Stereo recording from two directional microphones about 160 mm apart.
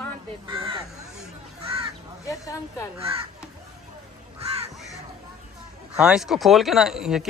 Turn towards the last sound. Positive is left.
turn(degrees=0)  # may be behind; listen again after turning